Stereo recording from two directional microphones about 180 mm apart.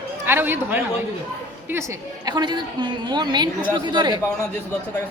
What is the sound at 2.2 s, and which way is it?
A woman's voice, 25° right (ahead or behind).